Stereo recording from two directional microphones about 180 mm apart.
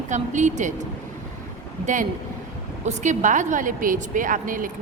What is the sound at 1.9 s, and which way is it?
A woman's voice, 45° right (ahead or behind).